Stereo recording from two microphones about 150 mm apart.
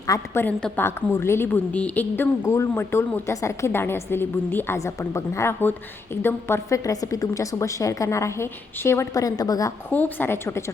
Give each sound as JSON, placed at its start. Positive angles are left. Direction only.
{"t": 0.1, "sound": "a woman's voice", "side_deg": 15}
{"t": 9.9, "sound": "a woman's voice", "side_deg": 10}